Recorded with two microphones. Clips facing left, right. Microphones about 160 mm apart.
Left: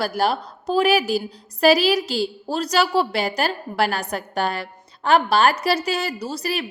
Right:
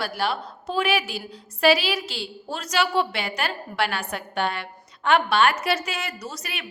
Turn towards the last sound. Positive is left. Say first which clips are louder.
# left 9 dB
turn(degrees=35)  # may be behind; listen again after turning